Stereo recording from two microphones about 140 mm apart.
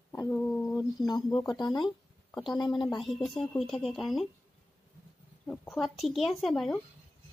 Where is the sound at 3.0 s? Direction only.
Centre (ahead or behind).